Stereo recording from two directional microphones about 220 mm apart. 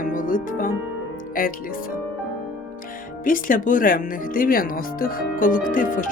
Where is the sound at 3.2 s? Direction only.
40° left (ahead or behind).